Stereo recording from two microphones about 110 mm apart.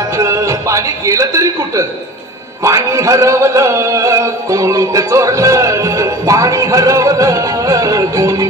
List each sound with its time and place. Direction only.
0.1 s a man's voice: 30° right (ahead or behind)
2.6 s music: 30° right (ahead or behind)